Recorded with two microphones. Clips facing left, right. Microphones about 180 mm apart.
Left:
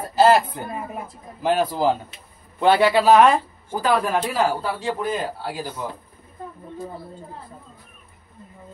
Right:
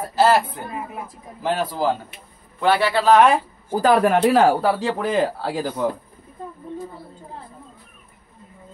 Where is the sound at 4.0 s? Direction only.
60° right (ahead or behind).